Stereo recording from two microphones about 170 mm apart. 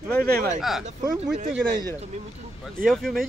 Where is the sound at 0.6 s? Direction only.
Centre (ahead or behind).